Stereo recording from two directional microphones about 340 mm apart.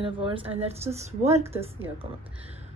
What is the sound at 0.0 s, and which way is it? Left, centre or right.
A woman's voice, centre.